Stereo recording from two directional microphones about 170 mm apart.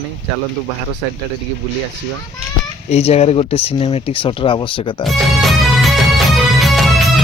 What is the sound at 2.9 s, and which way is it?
Speech, 40° left (ahead or behind).